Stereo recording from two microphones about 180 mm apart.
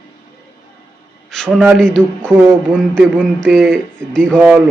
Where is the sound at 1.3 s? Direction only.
5° left (ahead or behind).